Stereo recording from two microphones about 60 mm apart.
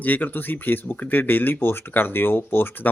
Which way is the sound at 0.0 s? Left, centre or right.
Left.